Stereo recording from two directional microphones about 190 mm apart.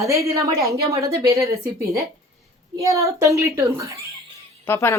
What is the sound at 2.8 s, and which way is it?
A woman's voice, 15° right (ahead or behind).